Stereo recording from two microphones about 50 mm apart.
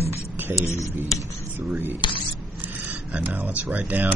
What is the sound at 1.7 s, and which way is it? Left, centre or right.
Speech, right.